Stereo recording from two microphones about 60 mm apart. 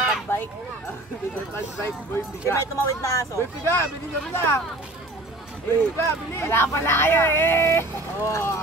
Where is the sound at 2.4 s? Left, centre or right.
Left.